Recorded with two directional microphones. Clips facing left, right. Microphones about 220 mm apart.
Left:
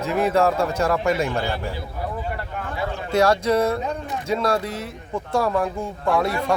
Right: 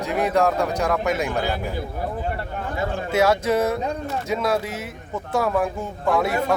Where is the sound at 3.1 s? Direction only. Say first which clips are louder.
Left 1 dB; 5° right (ahead or behind).